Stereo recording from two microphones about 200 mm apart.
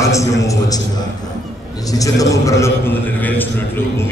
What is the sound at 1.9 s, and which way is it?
A man's voice, 15° left (ahead or behind).